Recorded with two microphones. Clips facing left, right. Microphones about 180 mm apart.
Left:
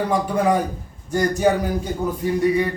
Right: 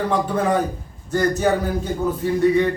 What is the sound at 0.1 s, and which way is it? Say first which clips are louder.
A man's voice: left 2 dB; 10° left (ahead or behind).